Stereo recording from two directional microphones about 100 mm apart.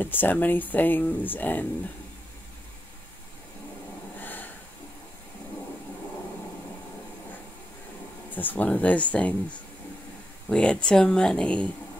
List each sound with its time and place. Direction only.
0.0 s speech: 20° left (ahead or behind)
4.2 s a sound: 20° left (ahead or behind)
8.4 s speech: 15° left (ahead or behind)